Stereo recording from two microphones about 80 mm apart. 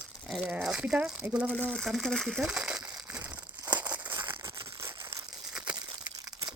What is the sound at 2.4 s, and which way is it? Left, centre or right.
Crumpling, centre.